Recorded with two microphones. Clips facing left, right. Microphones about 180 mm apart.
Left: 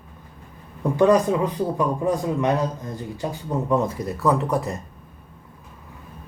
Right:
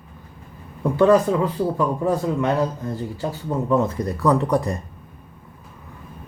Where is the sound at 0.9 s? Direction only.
15° left (ahead or behind).